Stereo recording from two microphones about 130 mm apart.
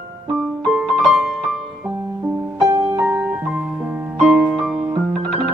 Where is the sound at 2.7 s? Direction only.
25° right (ahead or behind).